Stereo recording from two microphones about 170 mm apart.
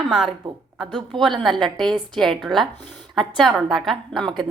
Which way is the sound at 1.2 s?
Centre (ahead or behind).